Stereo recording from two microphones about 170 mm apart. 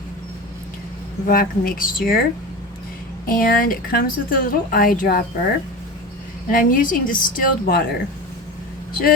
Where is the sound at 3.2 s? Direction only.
60° left (ahead or behind).